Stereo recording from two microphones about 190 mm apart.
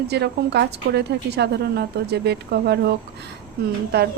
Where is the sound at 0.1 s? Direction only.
60° right (ahead or behind).